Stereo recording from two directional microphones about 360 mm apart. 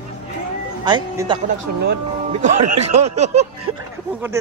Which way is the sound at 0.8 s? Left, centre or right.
Centre.